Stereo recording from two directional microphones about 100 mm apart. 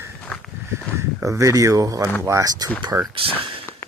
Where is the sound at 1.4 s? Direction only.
35° right (ahead or behind).